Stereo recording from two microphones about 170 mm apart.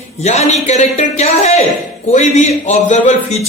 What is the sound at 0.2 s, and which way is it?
A man's voice, 40° left (ahead or behind).